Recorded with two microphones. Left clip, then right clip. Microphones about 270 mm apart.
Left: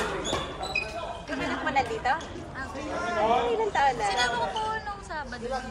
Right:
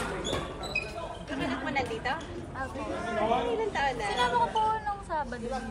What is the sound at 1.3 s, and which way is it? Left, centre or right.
Speech, left.